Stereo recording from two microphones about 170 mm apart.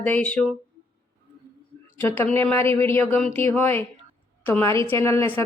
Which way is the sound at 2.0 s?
10° left (ahead or behind).